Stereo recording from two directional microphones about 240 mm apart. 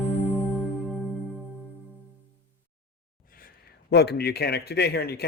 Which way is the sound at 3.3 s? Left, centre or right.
Left.